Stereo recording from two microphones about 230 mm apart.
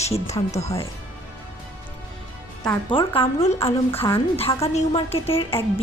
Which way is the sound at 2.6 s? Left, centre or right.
Left.